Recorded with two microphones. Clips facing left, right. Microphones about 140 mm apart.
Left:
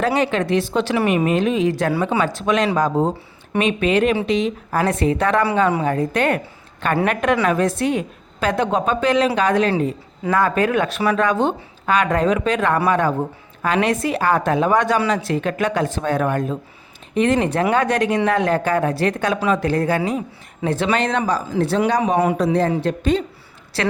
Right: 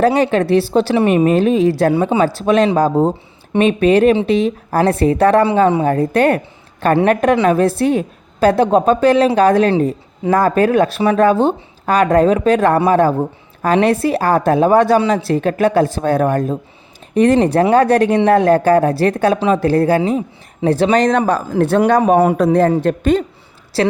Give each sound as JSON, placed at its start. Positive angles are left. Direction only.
{"t": 0.0, "sound": "a woman's voice", "side_deg": -35}
{"t": 3.6, "sound": "a woman's voice", "side_deg": -40}